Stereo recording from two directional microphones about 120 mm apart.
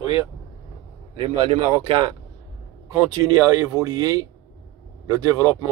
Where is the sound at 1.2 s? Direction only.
50° right (ahead or behind).